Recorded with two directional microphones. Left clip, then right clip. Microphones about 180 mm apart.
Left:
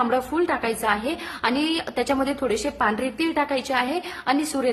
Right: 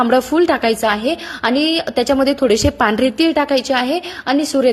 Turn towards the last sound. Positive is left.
turn(degrees=-30)  # may be behind; listen again after turning